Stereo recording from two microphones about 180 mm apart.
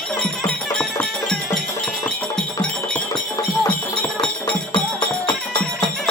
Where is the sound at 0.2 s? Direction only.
5° left (ahead or behind).